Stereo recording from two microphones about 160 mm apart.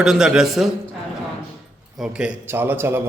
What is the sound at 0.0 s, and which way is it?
Speech, 5° right (ahead or behind).